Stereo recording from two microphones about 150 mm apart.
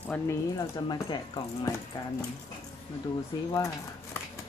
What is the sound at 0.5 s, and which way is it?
Speech, 30° left (ahead or behind).